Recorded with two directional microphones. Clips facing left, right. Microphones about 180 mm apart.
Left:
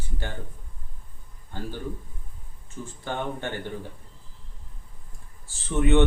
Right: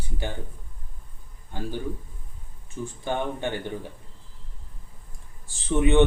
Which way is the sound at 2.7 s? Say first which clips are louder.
Right 4 dB; 15° right (ahead or behind).